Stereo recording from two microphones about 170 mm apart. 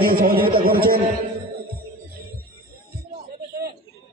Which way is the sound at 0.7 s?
60° right (ahead or behind).